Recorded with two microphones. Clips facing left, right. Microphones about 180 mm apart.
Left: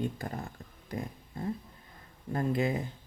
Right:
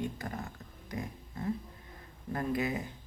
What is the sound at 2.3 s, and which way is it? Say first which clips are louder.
Speech: left 3 dB; 25° left (ahead or behind).